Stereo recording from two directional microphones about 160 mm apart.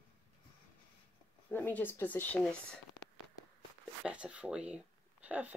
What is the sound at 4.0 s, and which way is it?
Speech, 5° right (ahead or behind).